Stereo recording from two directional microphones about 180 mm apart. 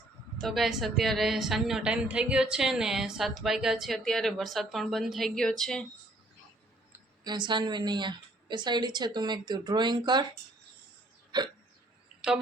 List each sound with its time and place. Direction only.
0.3 s a woman's voice: centre (ahead or behind)
7.3 s a woman's voice: 25° right (ahead or behind)
11.3 s hiccup: 25° right (ahead or behind)